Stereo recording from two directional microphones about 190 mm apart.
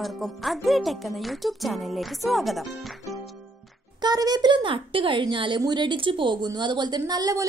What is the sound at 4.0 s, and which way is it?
Speech, 20° right (ahead or behind).